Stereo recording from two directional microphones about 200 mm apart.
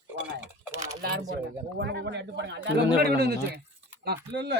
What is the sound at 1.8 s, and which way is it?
Speech, 60° right (ahead or behind).